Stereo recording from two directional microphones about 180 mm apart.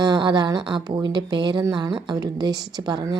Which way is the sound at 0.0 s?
25° right (ahead or behind).